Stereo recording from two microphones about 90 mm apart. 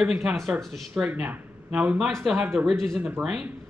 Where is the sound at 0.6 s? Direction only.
Centre (ahead or behind).